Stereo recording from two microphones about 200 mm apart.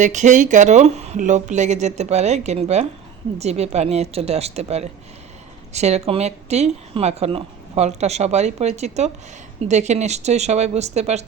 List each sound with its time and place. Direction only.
0.0 s speech: 35° right (ahead or behind)